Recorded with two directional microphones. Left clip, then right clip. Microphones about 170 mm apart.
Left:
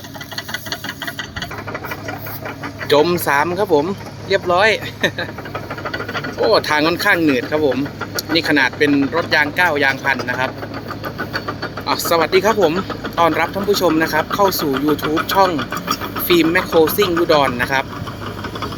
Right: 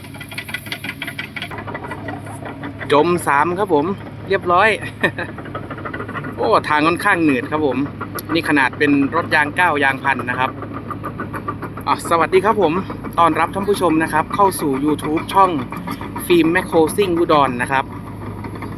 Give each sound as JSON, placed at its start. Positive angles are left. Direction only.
{"t": 2.9, "sound": "speech", "side_deg": 10}
{"t": 5.8, "sound": "a sound", "side_deg": -45}
{"t": 6.5, "sound": "speech", "side_deg": 10}
{"t": 11.0, "sound": "vehicle", "side_deg": -50}
{"t": 11.9, "sound": "speech", "side_deg": 10}